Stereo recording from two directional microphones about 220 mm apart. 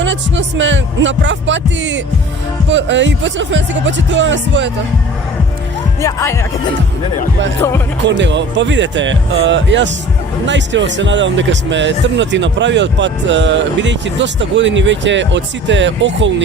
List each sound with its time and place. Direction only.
0.0 s speech: 55° right (ahead or behind)
6.0 s speech: 15° left (ahead or behind)
8.0 s speech: 55° right (ahead or behind)